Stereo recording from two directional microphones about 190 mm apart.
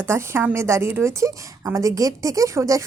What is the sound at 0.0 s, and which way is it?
A woman's voice, 15° right (ahead or behind).